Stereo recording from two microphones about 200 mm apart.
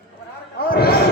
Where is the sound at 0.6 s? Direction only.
50° left (ahead or behind).